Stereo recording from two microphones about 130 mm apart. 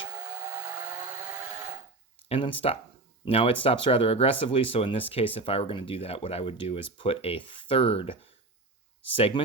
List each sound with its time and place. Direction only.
2.3 s speech: 45° left (ahead or behind)